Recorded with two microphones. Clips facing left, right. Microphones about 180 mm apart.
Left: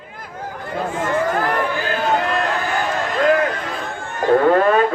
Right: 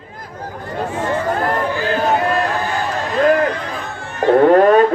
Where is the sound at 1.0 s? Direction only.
30° right (ahead or behind).